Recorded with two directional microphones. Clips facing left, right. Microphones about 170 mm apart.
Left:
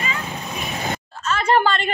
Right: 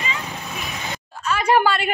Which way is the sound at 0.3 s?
15° left (ahead or behind).